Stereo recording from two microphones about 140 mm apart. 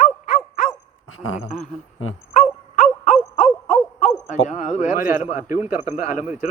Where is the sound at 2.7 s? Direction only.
60° left (ahead or behind).